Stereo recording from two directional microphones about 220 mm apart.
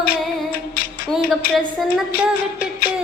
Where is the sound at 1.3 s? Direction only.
Centre (ahead or behind).